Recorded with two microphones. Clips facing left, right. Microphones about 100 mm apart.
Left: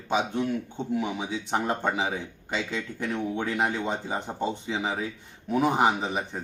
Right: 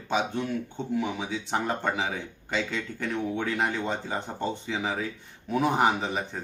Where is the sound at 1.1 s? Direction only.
15° left (ahead or behind).